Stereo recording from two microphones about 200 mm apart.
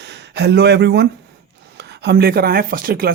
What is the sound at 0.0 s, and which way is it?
Speech, 60° right (ahead or behind).